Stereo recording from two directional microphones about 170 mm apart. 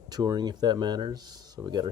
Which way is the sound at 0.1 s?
25° right (ahead or behind).